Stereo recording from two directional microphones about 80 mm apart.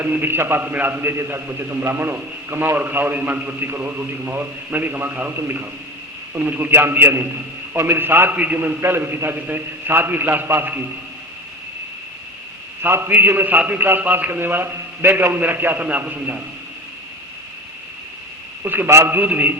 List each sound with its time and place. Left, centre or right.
0.0 s a man's voice: right
8.8 s a man's voice: right
12.8 s a man's voice: right
18.6 s a man's voice: right